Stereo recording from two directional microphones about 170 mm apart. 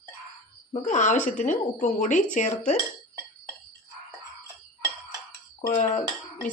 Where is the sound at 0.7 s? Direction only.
45° left (ahead or behind).